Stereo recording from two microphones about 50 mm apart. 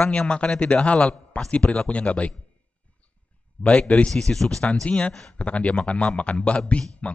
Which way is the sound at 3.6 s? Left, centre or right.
Left.